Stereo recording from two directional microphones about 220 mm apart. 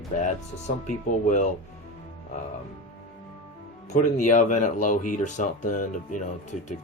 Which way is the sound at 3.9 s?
35° left (ahead or behind).